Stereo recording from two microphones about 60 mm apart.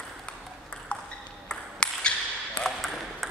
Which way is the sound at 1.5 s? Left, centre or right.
Centre.